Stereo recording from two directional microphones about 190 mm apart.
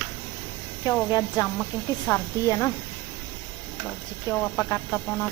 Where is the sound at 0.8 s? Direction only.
20° left (ahead or behind).